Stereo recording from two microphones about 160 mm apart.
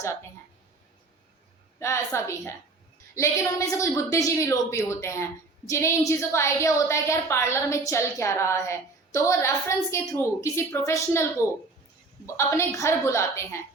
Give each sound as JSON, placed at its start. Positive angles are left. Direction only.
{"t": 1.8, "sound": "a woman's voice", "side_deg": 20}